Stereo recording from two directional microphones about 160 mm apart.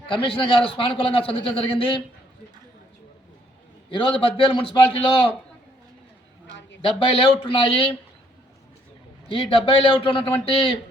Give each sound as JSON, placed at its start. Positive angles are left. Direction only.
{"t": 0.1, "sound": "a man's voice", "side_deg": 35}
{"t": 3.8, "sound": "a man's voice", "side_deg": 35}
{"t": 6.8, "sound": "a man's voice", "side_deg": 35}
{"t": 9.3, "sound": "a man's voice", "side_deg": 35}